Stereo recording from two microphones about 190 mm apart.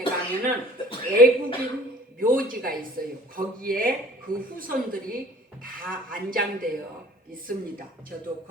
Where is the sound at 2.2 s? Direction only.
50° right (ahead or behind).